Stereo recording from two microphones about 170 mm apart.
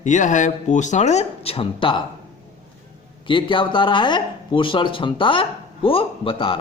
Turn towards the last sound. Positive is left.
turn(degrees=30)  # may be behind; listen again after turning